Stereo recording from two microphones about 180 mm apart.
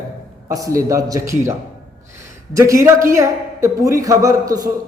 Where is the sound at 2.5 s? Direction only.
15° right (ahead or behind).